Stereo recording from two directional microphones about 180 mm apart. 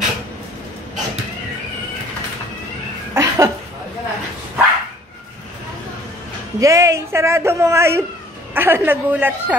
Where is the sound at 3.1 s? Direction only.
15° right (ahead or behind).